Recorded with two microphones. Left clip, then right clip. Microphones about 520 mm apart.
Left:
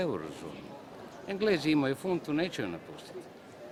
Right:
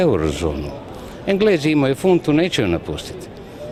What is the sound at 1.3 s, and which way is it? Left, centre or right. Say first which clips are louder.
Speech: right 12 dB; right.